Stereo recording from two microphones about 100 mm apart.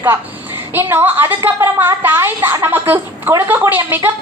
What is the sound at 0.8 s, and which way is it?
A woman's voice, 20° right (ahead or behind).